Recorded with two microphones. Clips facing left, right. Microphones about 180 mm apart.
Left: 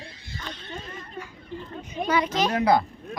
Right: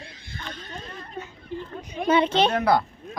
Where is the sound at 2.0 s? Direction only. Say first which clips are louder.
Right 4 dB; 25° right (ahead or behind).